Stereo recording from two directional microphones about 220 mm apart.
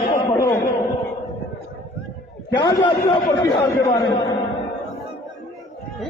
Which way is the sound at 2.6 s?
20° left (ahead or behind).